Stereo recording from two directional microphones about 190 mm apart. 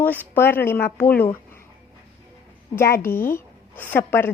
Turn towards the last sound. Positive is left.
turn(degrees=10)  # may be behind; listen again after turning